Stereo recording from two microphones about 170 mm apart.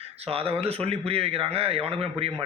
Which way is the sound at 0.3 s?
35° right (ahead or behind).